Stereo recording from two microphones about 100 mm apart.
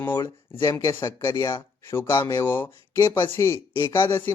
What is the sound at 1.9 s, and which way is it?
Speech, 25° left (ahead or behind).